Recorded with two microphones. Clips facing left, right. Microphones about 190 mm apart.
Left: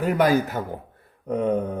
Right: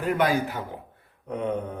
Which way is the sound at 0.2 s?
40° left (ahead or behind).